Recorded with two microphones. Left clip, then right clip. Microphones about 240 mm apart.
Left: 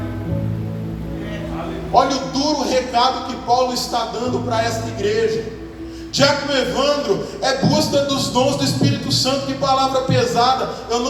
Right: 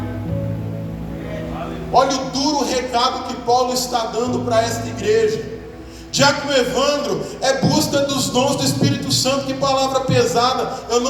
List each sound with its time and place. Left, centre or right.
1.9 s speech: right